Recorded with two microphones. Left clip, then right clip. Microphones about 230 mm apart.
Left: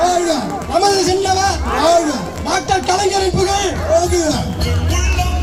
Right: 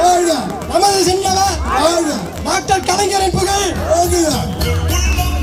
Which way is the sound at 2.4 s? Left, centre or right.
Right.